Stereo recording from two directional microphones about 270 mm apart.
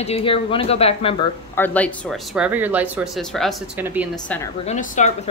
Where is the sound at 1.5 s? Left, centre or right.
Centre.